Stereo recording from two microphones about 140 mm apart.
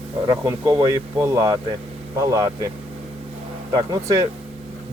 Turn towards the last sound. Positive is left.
turn(degrees=-25)  # may be behind; listen again after turning